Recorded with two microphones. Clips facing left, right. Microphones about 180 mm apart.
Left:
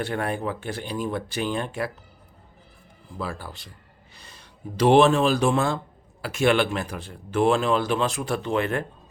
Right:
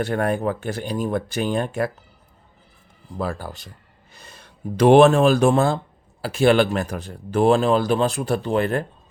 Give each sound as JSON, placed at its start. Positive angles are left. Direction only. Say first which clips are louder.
{"t": 0.0, "sound": "speech", "louder": "right 5 dB", "side_deg": -45}
{"t": 3.2, "sound": "speech", "louder": "right 5 dB", "side_deg": -40}